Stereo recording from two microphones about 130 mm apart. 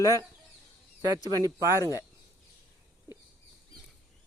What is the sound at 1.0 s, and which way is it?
Speech, 30° right (ahead or behind).